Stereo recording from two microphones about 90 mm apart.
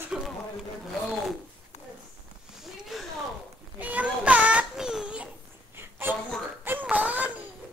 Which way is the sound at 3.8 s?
15° right (ahead or behind).